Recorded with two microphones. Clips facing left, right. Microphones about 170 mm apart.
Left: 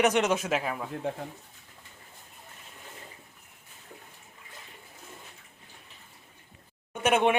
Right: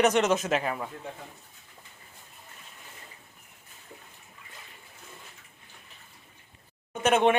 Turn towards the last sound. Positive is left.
turn(degrees=10)  # may be behind; listen again after turning